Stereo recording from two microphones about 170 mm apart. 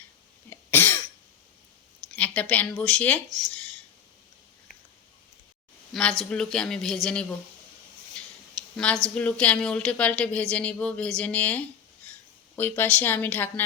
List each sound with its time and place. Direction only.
0.5 s cough: 10° left (ahead or behind)
2.1 s speech: 10° left (ahead or behind)
5.9 s a man's voice: centre (ahead or behind)
8.1 s a sound: 5° left (ahead or behind)
9.1 s speech: 5° left (ahead or behind)